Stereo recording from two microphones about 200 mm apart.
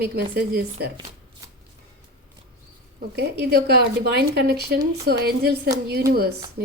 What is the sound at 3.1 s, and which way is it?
A woman's voice, 55° right (ahead or behind).